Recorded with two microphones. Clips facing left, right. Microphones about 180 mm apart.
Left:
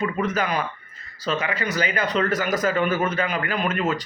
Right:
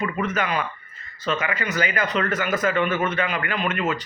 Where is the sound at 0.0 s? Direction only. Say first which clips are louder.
Left 1 dB; 35° left (ahead or behind).